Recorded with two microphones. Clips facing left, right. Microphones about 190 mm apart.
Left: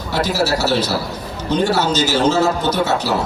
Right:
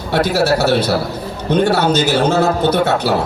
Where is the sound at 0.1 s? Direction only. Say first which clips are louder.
Right 4 dB; 60° right (ahead or behind).